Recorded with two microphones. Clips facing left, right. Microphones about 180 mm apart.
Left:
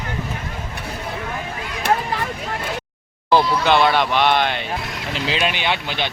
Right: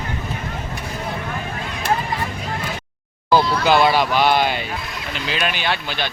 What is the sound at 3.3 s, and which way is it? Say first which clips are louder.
Speech: even; 5° right (ahead or behind).